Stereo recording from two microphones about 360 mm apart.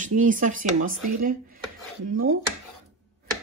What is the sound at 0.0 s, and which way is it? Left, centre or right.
Speech, right.